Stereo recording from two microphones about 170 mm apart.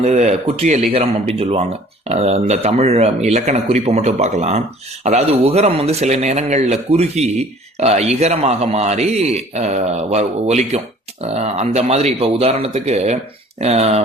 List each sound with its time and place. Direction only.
0.0 s a man's voice: 40° right (ahead or behind)